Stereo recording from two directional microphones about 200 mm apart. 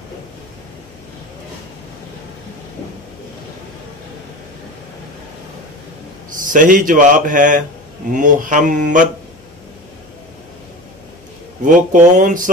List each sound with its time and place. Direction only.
6.3 s a man's voice: 40° right (ahead or behind)
11.6 s a man's voice: 40° right (ahead or behind)